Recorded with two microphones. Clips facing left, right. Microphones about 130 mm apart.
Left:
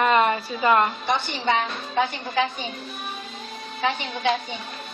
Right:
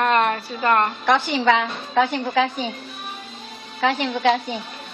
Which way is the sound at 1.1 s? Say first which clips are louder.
Right 6 dB; 90° right.